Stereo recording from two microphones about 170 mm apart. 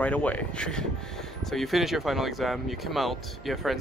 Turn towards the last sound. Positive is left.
turn(degrees=0)  # may be behind; listen again after turning